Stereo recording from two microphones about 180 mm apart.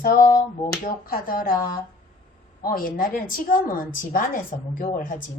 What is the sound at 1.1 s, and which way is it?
Speech, 55° left (ahead or behind).